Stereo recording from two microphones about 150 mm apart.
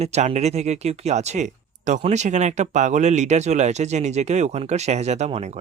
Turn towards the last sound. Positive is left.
turn(degrees=-50)  # may be behind; listen again after turning